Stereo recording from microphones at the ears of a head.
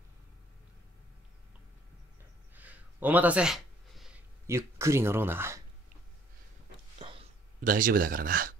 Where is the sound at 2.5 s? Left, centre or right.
Centre.